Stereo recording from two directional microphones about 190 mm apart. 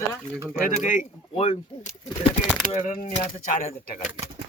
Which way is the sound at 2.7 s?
45° left (ahead or behind).